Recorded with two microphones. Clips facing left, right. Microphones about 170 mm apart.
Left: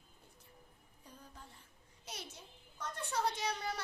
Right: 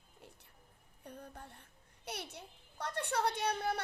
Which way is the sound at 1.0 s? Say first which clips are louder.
Right 7 dB; 60° right (ahead or behind).